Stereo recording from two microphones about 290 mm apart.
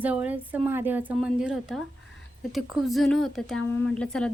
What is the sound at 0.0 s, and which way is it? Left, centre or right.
A woman's voice, centre.